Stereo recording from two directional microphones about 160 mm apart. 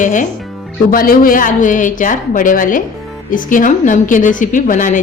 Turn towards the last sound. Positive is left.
turn(degrees=55)  # may be behind; listen again after turning